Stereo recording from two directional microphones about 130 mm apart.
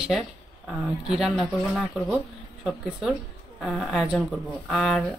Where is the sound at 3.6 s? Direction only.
Centre (ahead or behind).